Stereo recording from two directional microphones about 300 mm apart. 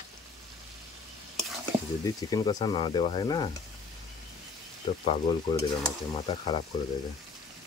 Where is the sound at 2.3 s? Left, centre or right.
Centre.